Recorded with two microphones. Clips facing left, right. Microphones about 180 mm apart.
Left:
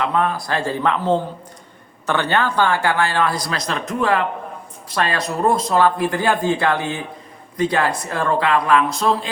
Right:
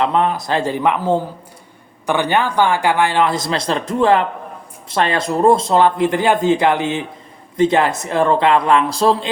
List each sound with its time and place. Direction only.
0.0 s speech: 20° right (ahead or behind)